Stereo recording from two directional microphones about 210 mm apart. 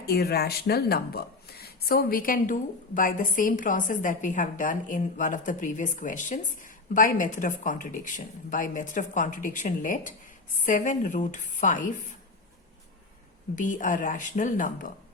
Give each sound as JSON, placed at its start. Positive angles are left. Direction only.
{"t": 0.0, "sound": "speech", "side_deg": 50}
{"t": 13.6, "sound": "speech", "side_deg": 40}